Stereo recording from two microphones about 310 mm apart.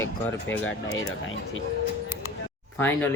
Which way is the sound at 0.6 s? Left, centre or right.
Left.